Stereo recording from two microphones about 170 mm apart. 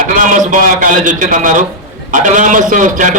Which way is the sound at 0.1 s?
50° right (ahead or behind).